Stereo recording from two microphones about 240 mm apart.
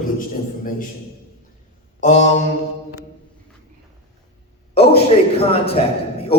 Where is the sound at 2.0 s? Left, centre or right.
Left.